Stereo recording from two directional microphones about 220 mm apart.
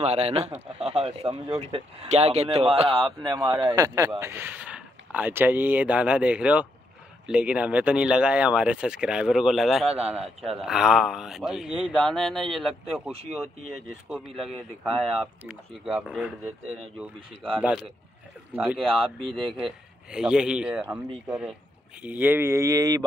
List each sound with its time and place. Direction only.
0.0 s speech: 25° right (ahead or behind); by 13.1 s 5° right (ahead or behind)
13.1 s speech: 25° right (ahead or behind)
14.0 s speech: centre (ahead or behind)
22.0 s speech: 10° right (ahead or behind)